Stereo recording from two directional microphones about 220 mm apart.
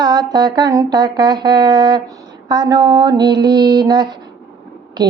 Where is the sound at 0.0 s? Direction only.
20° right (ahead or behind).